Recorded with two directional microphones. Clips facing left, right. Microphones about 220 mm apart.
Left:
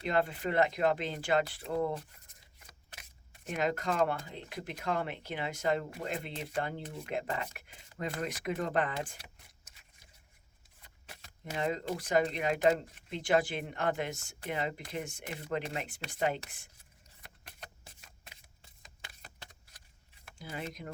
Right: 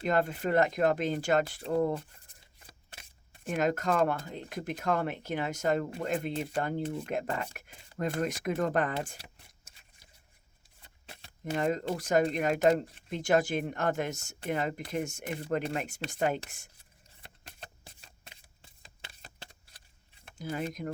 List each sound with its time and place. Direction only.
0.0 s speech: 45° right (ahead or behind)
2.1 s scissors: 30° right (ahead or behind)
3.4 s speech: 45° right (ahead or behind)
9.7 s a sound: 30° right (ahead or behind)
10.8 s shuffling cards: 25° right (ahead or behind)
11.5 s speech: 45° right (ahead or behind)
17.2 s shuffling cards: 30° right (ahead or behind)
20.4 s speech: 45° right (ahead or behind)